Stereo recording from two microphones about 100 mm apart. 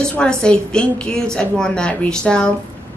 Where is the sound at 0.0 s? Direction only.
10° left (ahead or behind).